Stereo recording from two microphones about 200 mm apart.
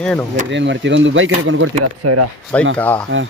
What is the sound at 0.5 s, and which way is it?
Speech, 65° right (ahead or behind).